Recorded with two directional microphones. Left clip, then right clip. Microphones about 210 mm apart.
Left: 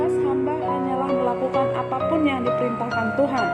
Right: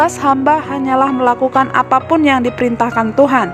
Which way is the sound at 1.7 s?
55° right (ahead or behind).